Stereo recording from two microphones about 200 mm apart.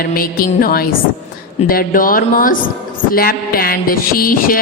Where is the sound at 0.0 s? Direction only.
45° left (ahead or behind).